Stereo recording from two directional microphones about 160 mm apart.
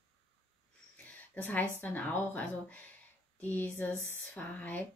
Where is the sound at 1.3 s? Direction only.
10° left (ahead or behind).